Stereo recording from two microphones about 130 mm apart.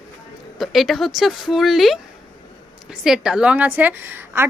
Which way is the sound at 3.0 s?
5° right (ahead or behind).